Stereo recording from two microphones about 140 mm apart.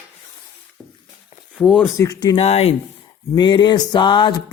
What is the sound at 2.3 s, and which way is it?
Speech, 50° left (ahead or behind).